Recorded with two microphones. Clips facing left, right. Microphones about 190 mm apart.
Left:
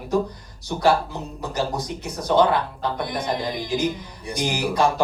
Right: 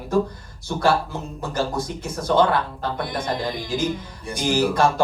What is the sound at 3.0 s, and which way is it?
Speech, 15° left (ahead or behind).